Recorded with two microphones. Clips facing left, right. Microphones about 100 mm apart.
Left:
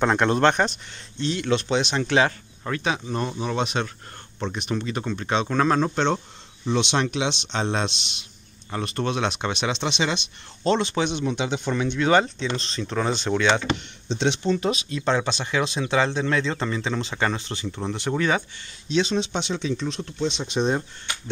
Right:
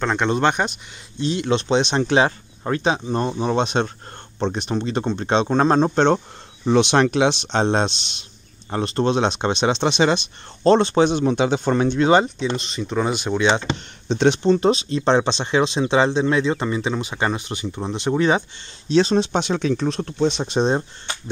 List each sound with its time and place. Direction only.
0.0 s speech: 5° left (ahead or behind)
1.2 s speech: 20° right (ahead or behind)
5.9 s speech: 40° right (ahead or behind)
12.0 s speech: 20° right (ahead or behind)
12.5 s speech: 10° right (ahead or behind)
14.0 s speech: 50° right (ahead or behind)
14.4 s speech: 35° right (ahead or behind)
18.9 s speech: 40° right (ahead or behind)